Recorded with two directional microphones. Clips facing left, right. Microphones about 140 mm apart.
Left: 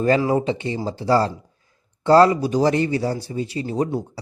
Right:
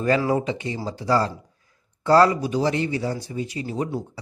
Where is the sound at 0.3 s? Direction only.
30° left (ahead or behind).